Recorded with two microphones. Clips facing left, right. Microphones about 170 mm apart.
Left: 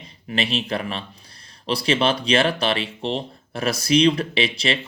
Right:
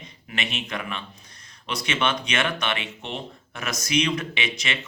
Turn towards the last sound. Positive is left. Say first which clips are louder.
# left 7 dB
turn(degrees=30)  # may be behind; listen again after turning